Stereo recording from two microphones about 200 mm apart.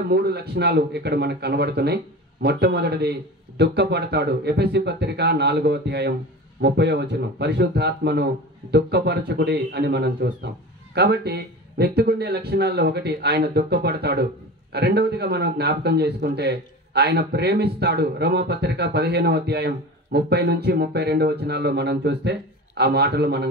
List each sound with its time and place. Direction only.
0.1 s a man's voice: 55° right (ahead or behind)